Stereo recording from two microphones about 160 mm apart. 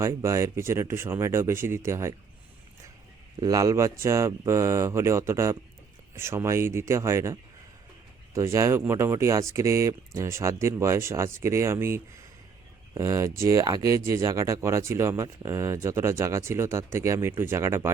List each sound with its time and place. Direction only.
0.0 s speech: 20° right (ahead or behind)
3.4 s speech: 20° right (ahead or behind)